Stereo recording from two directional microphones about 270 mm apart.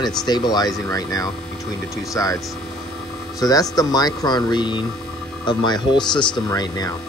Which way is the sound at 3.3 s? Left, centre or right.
Centre.